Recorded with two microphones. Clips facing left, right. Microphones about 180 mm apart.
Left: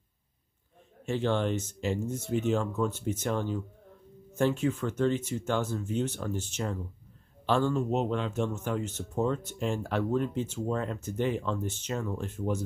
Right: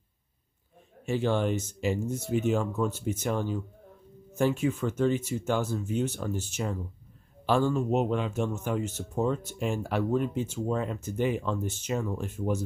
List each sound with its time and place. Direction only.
1.0 s speech: 10° right (ahead or behind)